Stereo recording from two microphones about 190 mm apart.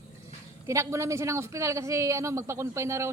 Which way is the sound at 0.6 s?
15° right (ahead or behind).